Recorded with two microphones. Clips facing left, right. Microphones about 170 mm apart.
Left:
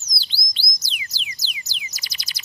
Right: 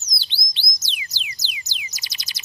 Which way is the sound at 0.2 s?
20° right (ahead or behind).